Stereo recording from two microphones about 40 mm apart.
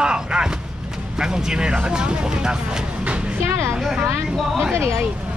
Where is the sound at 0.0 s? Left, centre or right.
Right.